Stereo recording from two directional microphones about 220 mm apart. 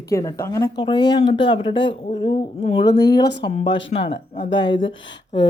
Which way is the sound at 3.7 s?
55° left (ahead or behind).